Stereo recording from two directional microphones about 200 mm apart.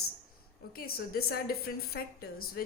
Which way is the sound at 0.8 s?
50° left (ahead or behind).